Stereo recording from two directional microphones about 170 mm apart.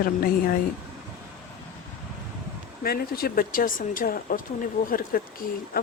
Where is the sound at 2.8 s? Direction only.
65° left (ahead or behind).